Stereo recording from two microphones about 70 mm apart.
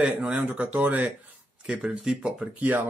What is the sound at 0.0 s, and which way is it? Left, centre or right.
Speech, centre.